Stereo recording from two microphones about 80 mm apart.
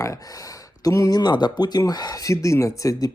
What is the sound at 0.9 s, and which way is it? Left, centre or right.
Speech, left.